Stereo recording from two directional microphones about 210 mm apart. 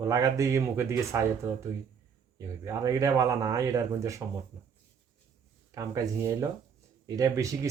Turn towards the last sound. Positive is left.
turn(degrees=-15)  # may be behind; listen again after turning